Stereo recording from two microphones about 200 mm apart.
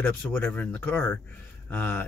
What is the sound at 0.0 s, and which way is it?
Speech, 10° left (ahead or behind).